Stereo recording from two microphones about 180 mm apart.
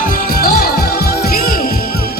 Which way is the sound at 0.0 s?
55° left (ahead or behind).